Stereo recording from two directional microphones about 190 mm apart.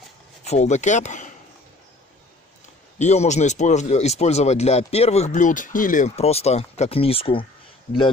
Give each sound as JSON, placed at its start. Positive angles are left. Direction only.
{"t": 0.5, "sound": "speech", "side_deg": 40}
{"t": 3.0, "sound": "speech", "side_deg": 35}